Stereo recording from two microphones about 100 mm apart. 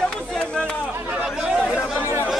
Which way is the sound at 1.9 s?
25° right (ahead or behind).